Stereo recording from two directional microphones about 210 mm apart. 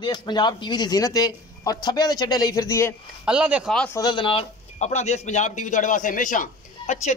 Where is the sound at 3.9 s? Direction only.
20° left (ahead or behind).